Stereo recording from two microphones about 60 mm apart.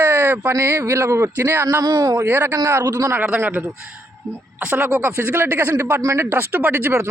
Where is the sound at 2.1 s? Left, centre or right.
Right.